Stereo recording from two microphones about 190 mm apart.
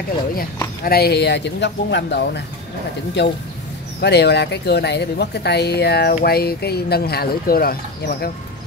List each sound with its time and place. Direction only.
0.8 s speech: 55° left (ahead or behind)